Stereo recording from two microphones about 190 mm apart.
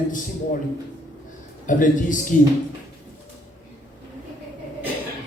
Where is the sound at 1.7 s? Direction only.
45° left (ahead or behind).